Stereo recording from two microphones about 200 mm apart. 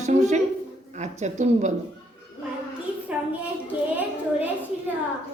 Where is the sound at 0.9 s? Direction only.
35° right (ahead or behind).